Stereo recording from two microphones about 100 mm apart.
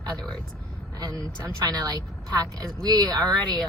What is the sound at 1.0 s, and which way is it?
Speech, 35° right (ahead or behind).